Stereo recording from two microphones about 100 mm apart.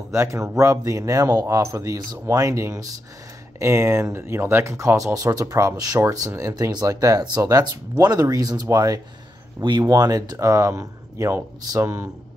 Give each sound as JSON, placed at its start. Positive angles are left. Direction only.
{"t": 0.1, "sound": "a man's voice", "side_deg": -30}